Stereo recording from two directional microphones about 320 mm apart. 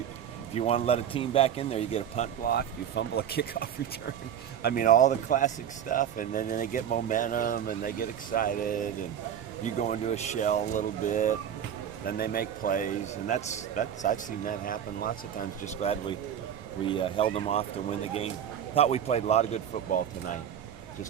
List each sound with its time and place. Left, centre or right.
0.5 s a man's voice: centre
18.7 s a man's voice: centre